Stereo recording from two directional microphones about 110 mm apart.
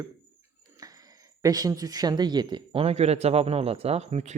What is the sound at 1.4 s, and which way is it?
Speech, 35° right (ahead or behind).